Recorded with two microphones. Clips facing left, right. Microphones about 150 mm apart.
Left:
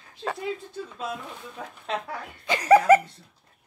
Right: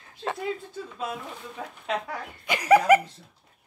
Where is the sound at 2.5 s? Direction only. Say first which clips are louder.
Left 2 dB; 10° right (ahead or behind).